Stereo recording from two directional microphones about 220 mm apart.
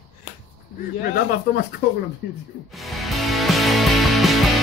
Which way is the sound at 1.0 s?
40° left (ahead or behind).